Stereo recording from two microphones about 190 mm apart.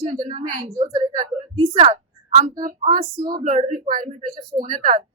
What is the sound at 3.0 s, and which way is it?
Speech, 20° right (ahead or behind).